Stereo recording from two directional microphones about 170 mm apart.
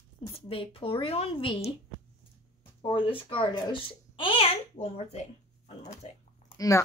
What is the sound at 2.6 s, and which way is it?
A child's voice, 30° left (ahead or behind).